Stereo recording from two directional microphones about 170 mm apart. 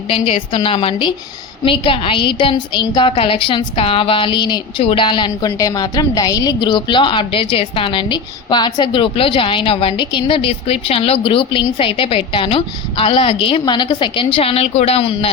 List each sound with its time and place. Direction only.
0.1 s a woman's voice: 30° left (ahead or behind)